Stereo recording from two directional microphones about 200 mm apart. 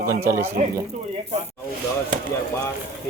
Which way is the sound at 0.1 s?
15° right (ahead or behind).